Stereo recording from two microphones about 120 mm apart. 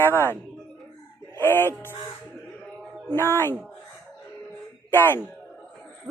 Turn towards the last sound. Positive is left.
turn(degrees=20)  # may be behind; listen again after turning